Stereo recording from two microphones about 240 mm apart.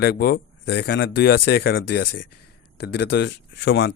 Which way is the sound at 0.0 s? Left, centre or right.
Left.